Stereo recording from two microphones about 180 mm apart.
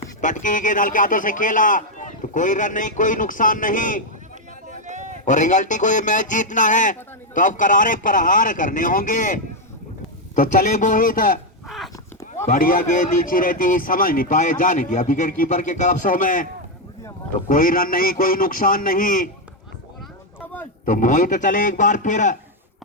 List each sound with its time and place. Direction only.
0.2 s a man's voice: 45° left (ahead or behind)
4.7 s a sound: 40° right (ahead or behind)
5.2 s a man's voice: 45° left (ahead or behind)
12.5 s a man's voice: 50° left (ahead or behind)
17.5 s a man's voice: 50° left (ahead or behind)
20.4 s a sound: 10° left (ahead or behind)
20.8 s a man's voice: 45° left (ahead or behind)